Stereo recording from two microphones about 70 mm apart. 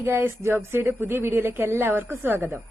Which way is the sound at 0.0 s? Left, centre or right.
Right.